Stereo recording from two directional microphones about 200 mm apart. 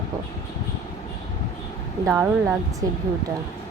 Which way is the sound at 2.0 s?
15° right (ahead or behind).